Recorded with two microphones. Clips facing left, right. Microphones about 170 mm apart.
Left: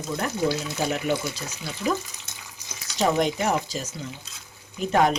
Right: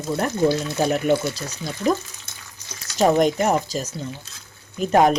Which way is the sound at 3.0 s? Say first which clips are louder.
Right 5 dB; 45° right (ahead or behind).